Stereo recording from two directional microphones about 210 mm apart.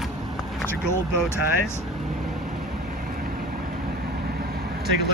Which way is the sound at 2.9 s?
45° right (ahead or behind).